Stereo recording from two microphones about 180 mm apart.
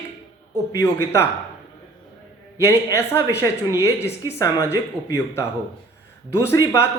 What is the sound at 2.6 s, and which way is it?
A man's voice, 15° left (ahead or behind).